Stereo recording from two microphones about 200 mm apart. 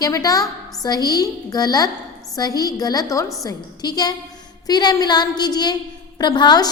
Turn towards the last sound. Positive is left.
turn(degrees=20)  # may be behind; listen again after turning